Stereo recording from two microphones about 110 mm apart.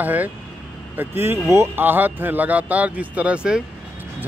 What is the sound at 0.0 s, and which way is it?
Speech, 15° right (ahead or behind).